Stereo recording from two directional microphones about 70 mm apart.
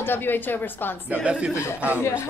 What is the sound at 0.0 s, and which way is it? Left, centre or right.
Speech, left.